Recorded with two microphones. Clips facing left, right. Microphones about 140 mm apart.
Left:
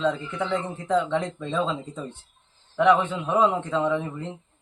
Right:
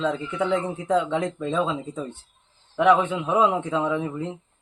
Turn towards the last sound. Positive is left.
turn(degrees=-10)  # may be behind; listen again after turning